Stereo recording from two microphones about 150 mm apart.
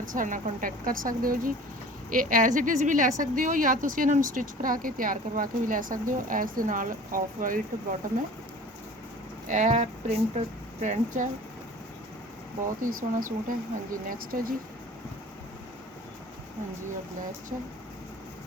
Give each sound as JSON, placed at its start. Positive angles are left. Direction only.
{"t": 0.1, "sound": "a woman's voice", "side_deg": -60}
{"t": 9.5, "sound": "speech", "side_deg": -55}
{"t": 12.8, "sound": "a woman's voice", "side_deg": -65}